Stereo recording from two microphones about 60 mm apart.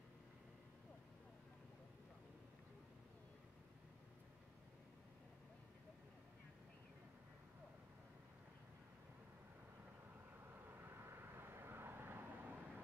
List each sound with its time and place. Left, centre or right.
10.4 s vehicle: right